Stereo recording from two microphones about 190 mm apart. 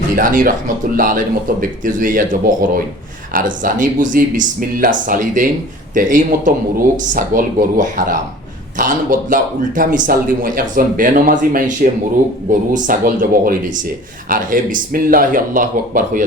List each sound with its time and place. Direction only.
0.2 s a man's voice: 45° right (ahead or behind)